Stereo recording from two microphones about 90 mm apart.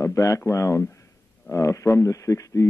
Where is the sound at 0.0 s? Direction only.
35° left (ahead or behind).